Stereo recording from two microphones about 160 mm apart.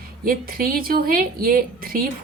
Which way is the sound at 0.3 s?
65° right (ahead or behind).